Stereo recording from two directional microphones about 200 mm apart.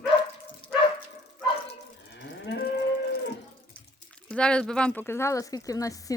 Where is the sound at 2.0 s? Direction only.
65° left (ahead or behind).